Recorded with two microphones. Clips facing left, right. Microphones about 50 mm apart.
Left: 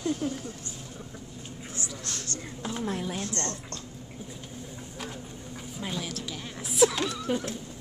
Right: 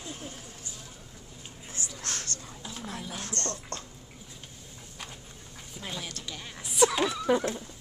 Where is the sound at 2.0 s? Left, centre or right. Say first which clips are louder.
Right 1 dB; right.